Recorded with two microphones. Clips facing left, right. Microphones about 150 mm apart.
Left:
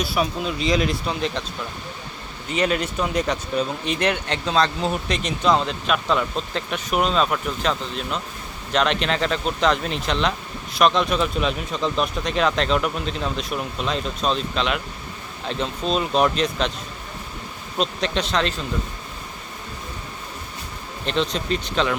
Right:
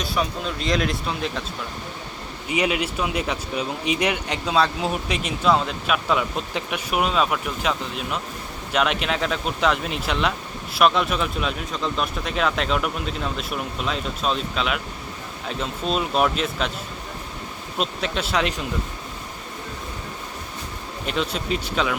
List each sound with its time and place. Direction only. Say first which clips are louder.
0.0 s speech: left 2 dB; 10° left (ahead or behind)
2.5 s speech: left 1 dB; 10° right (ahead or behind)
17.7 s speech: left 2 dB; 5° right (ahead or behind)
21.0 s speech: left 2 dB; 5° right (ahead or behind)